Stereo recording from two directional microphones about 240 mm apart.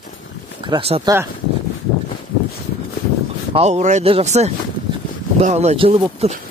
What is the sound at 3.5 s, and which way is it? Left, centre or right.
Speech, right.